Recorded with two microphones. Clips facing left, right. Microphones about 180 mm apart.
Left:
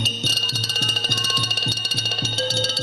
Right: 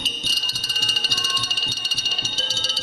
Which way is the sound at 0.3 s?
70° left (ahead or behind).